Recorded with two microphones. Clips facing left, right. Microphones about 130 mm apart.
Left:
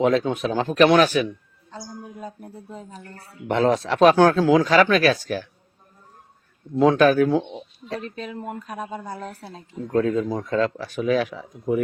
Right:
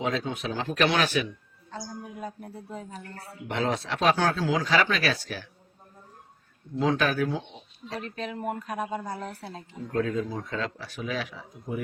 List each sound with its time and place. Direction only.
0.0 s speech: 50° left (ahead or behind)
3.4 s speech: 45° left (ahead or behind)
6.7 s speech: 50° left (ahead or behind)
9.9 s speech: 40° left (ahead or behind)
11.3 s a man's voice: 90° left